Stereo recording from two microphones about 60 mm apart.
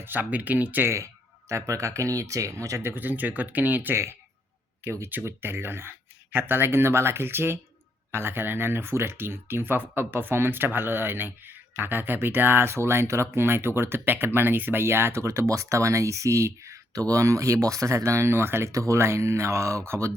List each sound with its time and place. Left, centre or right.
0.0 s speech: right
1.5 s speech: right
2.9 s speech: right
15.2 s speech: right
18.7 s speech: right